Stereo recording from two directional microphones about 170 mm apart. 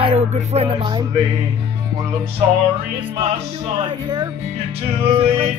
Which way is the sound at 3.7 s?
25° right (ahead or behind).